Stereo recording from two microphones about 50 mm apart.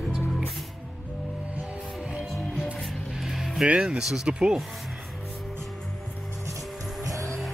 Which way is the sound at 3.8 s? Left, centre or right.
Centre.